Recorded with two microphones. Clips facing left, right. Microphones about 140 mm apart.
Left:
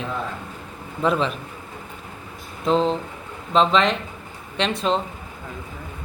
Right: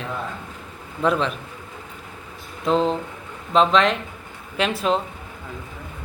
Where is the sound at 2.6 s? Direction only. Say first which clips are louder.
Even; centre (ahead or behind).